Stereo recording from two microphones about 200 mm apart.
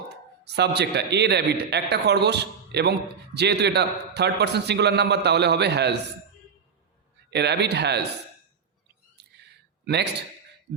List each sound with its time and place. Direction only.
0.1 s a man's voice: 55° right (ahead or behind)
7.3 s a man's voice: 55° right (ahead or behind)
9.2 s whispering: 55° right (ahead or behind)
9.8 s a man's voice: 55° right (ahead or behind)